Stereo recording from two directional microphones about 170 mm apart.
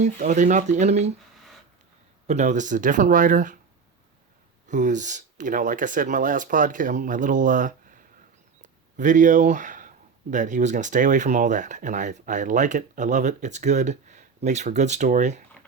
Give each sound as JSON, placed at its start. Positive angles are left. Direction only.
{"t": 0.0, "sound": "speech", "side_deg": -45}
{"t": 2.2, "sound": "speech", "side_deg": -45}
{"t": 4.7, "sound": "speech", "side_deg": -45}
{"t": 8.6, "sound": "a sound", "side_deg": -45}
{"t": 10.3, "sound": "speech", "side_deg": -45}